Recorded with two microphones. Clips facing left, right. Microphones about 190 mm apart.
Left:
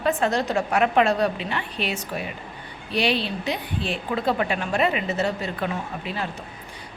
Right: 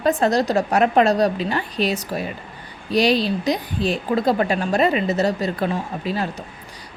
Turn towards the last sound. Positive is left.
turn(degrees=-40)  # may be behind; listen again after turning